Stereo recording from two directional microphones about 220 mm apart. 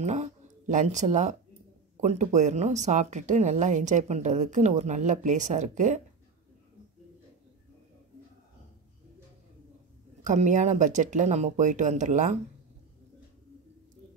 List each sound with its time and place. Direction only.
0.0 s speech: 30° right (ahead or behind)
10.2 s speech: 35° right (ahead or behind)